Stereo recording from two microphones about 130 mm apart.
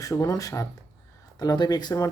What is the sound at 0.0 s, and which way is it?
Speech, 25° left (ahead or behind).